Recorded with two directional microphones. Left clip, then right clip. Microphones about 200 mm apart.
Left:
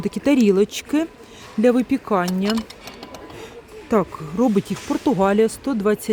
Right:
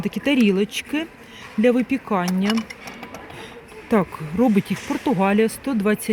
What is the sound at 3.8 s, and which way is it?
Speech, 10° left (ahead or behind).